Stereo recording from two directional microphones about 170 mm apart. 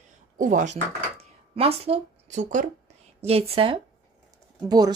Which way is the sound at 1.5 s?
35° right (ahead or behind).